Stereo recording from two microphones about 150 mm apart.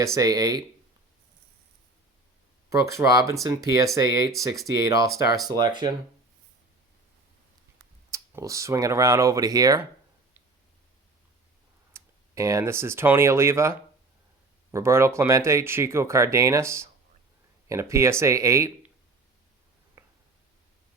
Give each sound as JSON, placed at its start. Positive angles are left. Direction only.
{"t": 0.0, "sound": "speech", "side_deg": -20}
{"t": 2.6, "sound": "speech", "side_deg": -20}
{"t": 8.1, "sound": "speech", "side_deg": -20}
{"t": 11.9, "sound": "speech", "side_deg": -20}